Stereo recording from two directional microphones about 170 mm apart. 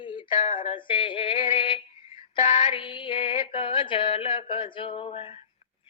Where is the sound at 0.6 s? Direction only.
30° left (ahead or behind).